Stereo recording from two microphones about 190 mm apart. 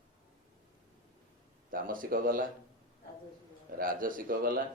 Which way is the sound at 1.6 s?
45° right (ahead or behind).